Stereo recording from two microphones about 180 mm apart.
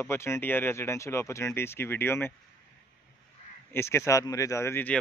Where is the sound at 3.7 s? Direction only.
15° left (ahead or behind).